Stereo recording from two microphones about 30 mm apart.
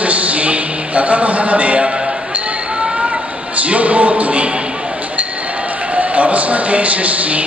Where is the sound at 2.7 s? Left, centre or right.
Right.